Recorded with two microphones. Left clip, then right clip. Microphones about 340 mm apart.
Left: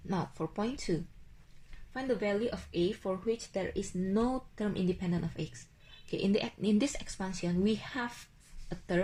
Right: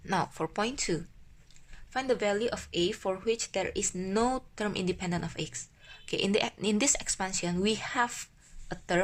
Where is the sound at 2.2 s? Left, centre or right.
Right.